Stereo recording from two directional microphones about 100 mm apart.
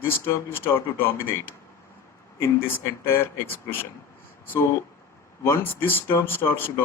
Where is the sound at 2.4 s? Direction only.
25° left (ahead or behind).